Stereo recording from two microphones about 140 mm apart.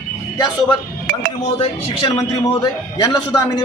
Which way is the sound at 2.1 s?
25° left (ahead or behind).